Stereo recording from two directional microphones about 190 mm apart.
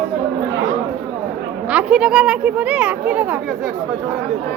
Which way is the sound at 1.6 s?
5° right (ahead or behind).